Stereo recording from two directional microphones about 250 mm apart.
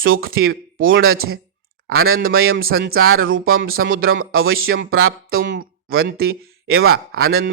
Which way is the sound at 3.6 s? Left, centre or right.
Right.